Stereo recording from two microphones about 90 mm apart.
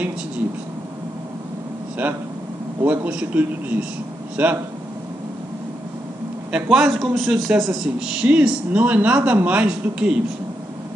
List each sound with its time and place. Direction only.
2.8 s a man's voice: 20° right (ahead or behind)
6.5 s a man's voice: 5° right (ahead or behind)